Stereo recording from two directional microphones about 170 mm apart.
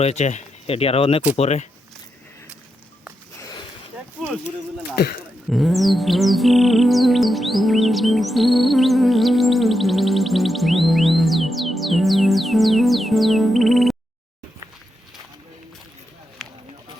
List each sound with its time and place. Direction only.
0.0 s speech: 40° left (ahead or behind)
4.9 s speech: 60° left (ahead or behind)
5.5 s music: centre (ahead or behind)
16.4 s run: centre (ahead or behind)